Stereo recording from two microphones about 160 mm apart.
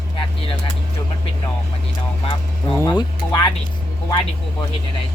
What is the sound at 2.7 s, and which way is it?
Speech, 25° left (ahead or behind).